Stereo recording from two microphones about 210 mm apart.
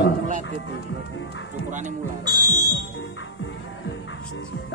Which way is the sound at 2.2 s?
20° right (ahead or behind).